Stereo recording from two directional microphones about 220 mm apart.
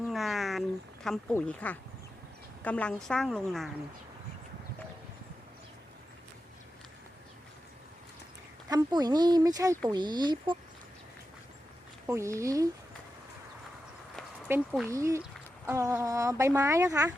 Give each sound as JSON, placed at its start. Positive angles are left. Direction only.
{"t": 0.0, "sound": "a sound", "side_deg": 0}
{"t": 1.0, "sound": "a woman's voice", "side_deg": 5}
{"t": 8.7, "sound": "speech", "side_deg": -20}
{"t": 12.0, "sound": "speech", "side_deg": -15}
{"t": 14.2, "sound": "speech", "side_deg": -5}